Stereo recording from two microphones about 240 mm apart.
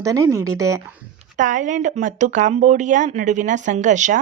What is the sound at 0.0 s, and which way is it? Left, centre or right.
Speech, centre.